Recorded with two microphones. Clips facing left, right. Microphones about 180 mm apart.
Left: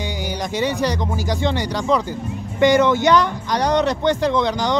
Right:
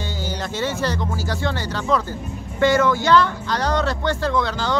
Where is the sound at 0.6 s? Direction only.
15° left (ahead or behind).